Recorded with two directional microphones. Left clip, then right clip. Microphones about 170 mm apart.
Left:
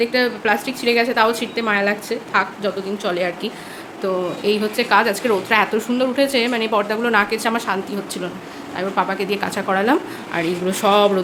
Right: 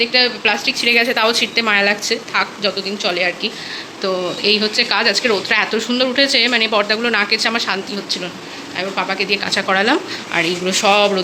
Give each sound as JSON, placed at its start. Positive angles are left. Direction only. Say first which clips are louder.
{"t": 0.0, "sound": "a woman's voice", "louder": "right 3 dB", "side_deg": 20}
{"t": 0.8, "sound": "speech", "louder": "right 2 dB", "side_deg": 5}
{"t": 4.0, "sound": "speech", "louder": "right 2 dB", "side_deg": 10}